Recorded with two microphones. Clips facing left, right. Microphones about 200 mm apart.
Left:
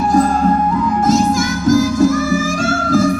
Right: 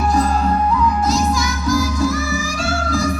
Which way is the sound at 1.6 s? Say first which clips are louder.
Left 7 dB; 50° left (ahead or behind).